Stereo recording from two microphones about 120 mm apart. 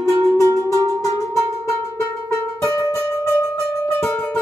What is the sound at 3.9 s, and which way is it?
Music, 15° left (ahead or behind).